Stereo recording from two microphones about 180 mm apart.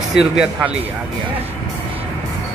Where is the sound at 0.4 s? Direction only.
5° right (ahead or behind).